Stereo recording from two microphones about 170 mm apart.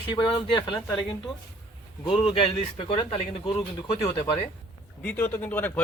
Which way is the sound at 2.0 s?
30° left (ahead or behind).